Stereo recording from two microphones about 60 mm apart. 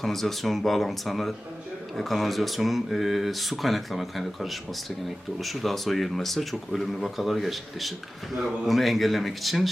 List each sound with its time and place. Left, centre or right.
0.0 s speech: centre